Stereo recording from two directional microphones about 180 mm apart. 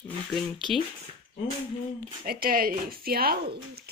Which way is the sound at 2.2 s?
55° right (ahead or behind).